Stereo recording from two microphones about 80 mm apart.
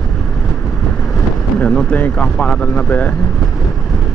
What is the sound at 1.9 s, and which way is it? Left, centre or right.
Speech, centre.